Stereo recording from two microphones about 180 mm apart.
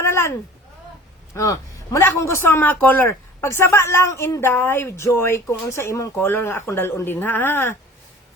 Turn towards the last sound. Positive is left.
turn(degrees=10)  # may be behind; listen again after turning